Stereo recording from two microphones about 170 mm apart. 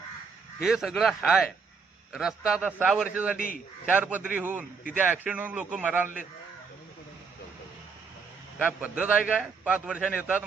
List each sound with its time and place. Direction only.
0.6 s a man's voice: centre (ahead or behind)
3.3 s a man's voice: 60° left (ahead or behind)
3.8 s a man's voice: 10° right (ahead or behind)
8.5 s a man's voice: 10° right (ahead or behind)